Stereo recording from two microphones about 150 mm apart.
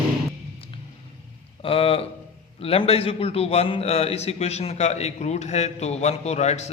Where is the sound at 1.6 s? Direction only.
40° left (ahead or behind).